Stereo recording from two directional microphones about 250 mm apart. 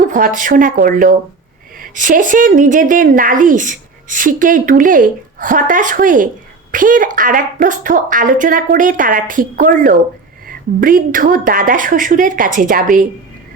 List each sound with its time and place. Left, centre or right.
0.1 s a woman's voice: right